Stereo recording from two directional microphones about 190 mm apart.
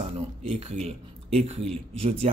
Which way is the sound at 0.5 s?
35° right (ahead or behind).